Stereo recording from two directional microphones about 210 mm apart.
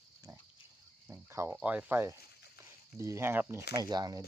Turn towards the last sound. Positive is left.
turn(degrees=-20)  # may be behind; listen again after turning